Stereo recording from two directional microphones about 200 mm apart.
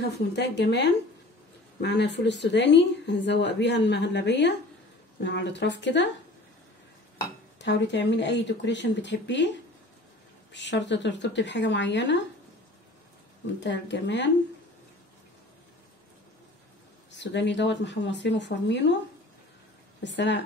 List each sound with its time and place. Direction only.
0.4 s a woman's voice: 60° left (ahead or behind)
7.6 s a woman's voice: 60° left (ahead or behind)
10.5 s a woman's voice: 60° left (ahead or behind)
13.6 s a woman's voice: 60° left (ahead or behind)
17.1 s a woman's voice: 60° left (ahead or behind)
20.0 s a woman's voice: 60° left (ahead or behind)